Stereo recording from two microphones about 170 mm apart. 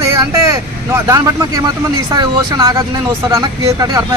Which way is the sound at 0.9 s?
20° right (ahead or behind).